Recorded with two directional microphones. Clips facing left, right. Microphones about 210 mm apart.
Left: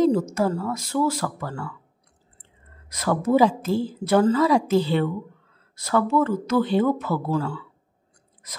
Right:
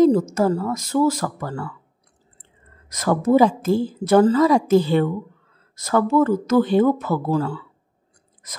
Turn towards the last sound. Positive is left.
turn(degrees=-35)  # may be behind; listen again after turning